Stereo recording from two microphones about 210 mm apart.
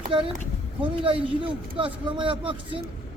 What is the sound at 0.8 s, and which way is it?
Speech, 25° right (ahead or behind).